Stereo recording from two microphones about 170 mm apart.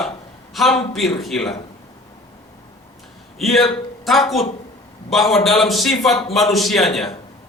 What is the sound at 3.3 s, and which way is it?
A man's voice, centre (ahead or behind).